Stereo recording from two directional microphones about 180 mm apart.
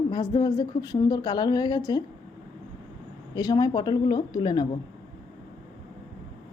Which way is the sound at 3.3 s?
20° left (ahead or behind).